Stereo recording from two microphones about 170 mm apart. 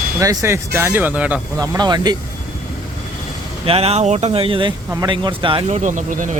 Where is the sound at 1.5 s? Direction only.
20° right (ahead or behind).